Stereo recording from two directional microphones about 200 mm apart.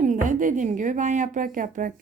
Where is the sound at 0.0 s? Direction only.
40° right (ahead or behind).